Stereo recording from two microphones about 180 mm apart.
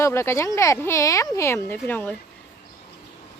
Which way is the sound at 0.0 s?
15° left (ahead or behind).